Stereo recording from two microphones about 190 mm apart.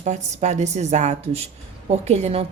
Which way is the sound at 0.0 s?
40° right (ahead or behind).